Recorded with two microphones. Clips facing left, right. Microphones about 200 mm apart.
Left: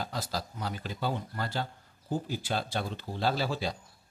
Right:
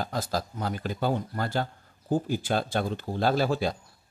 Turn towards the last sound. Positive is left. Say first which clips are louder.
# right 6 dB
turn(degrees=-50)  # may be behind; listen again after turning